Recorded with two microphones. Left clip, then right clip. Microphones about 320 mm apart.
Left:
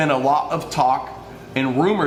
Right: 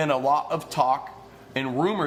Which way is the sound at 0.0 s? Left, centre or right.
Right.